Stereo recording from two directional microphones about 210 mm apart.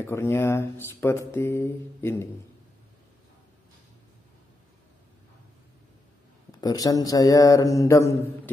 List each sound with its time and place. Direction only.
0.0 s speech: 10° left (ahead or behind)
6.6 s speech: 20° left (ahead or behind)